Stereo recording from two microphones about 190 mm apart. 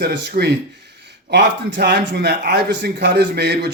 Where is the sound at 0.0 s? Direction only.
60° right (ahead or behind).